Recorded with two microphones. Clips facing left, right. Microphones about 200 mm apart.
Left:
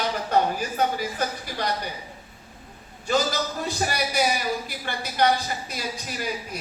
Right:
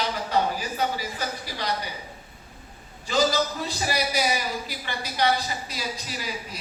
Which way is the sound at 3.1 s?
50° left (ahead or behind).